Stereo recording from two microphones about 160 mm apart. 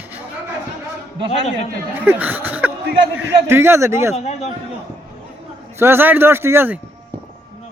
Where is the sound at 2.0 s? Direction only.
10° right (ahead or behind).